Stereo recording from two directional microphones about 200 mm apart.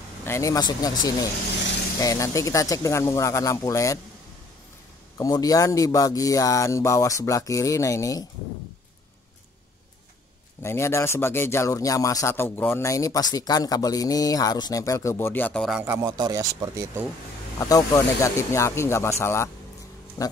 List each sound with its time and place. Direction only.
0.2 s a man's voice: 15° left (ahead or behind)
5.1 s a man's voice: 15° left (ahead or behind)
10.6 s a man's voice: 15° left (ahead or behind)
15.8 s speech: 10° right (ahead or behind)
17.6 s a man's voice: 15° left (ahead or behind)